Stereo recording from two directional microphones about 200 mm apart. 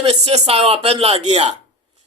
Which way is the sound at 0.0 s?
30° right (ahead or behind).